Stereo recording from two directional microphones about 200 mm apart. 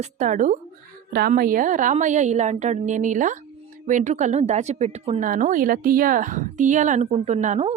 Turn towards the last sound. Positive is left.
turn(degrees=-35)  # may be behind; listen again after turning